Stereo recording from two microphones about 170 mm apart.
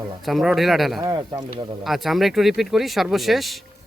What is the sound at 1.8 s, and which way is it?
Speech, centre (ahead or behind).